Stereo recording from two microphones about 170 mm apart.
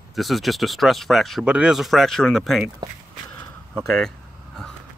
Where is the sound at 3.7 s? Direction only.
5° left (ahead or behind).